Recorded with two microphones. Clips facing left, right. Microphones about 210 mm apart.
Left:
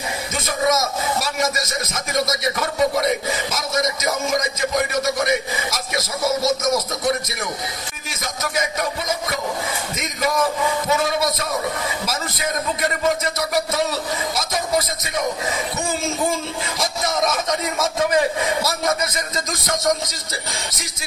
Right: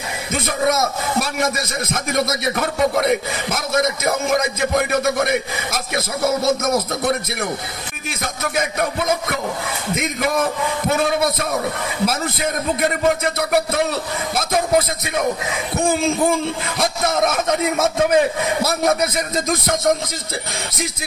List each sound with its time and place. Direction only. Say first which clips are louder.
0.3 s a man's voice: right 2 dB; 55° right (ahead or behind)
8.2 s a man's voice: right 2 dB; 60° right (ahead or behind)